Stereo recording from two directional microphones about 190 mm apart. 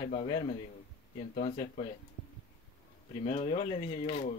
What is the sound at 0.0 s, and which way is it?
Speech, 30° left (ahead or behind).